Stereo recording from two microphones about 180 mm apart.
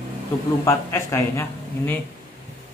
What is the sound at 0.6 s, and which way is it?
A man's voice, 15° left (ahead or behind).